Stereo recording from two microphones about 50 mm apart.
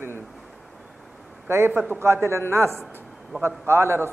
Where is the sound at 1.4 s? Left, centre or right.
Right.